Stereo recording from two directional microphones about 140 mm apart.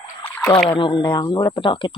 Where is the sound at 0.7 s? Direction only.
35° left (ahead or behind).